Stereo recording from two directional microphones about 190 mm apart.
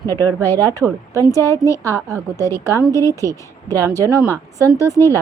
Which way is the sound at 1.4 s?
15° left (ahead or behind).